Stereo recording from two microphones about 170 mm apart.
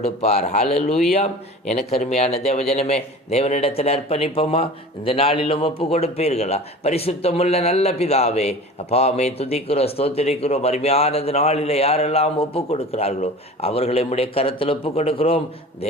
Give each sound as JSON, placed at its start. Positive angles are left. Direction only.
{"t": 0.0, "sound": "a man's voice", "side_deg": 40}